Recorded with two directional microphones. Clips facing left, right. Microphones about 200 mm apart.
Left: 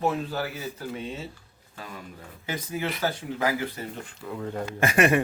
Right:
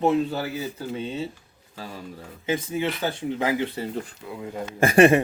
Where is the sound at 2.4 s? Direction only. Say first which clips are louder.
Right 5 dB; 25° right (ahead or behind).